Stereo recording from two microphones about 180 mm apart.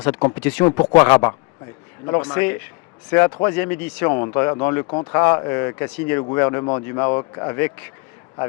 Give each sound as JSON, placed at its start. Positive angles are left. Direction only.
{"t": 0.0, "sound": "speech", "side_deg": 15}
{"t": 0.9, "sound": "speech", "side_deg": 25}